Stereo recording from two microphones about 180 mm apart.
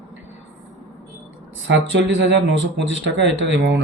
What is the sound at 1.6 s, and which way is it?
Speech, 90° right.